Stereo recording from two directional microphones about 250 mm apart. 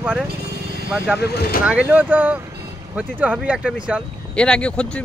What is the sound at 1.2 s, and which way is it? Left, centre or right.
Speech, left.